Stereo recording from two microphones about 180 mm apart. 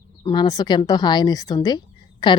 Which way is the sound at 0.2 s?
20° left (ahead or behind).